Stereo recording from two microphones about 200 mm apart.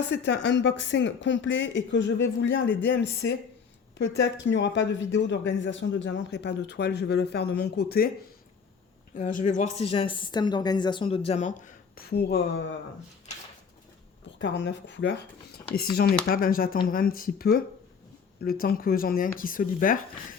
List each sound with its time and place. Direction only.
0.1 s speech: 60° left (ahead or behind)
9.1 s a woman's voice: 40° left (ahead or behind)
11.9 s speech: 55° left (ahead or behind)
14.3 s speech: 60° left (ahead or behind)
16.2 s speech: 45° left (ahead or behind)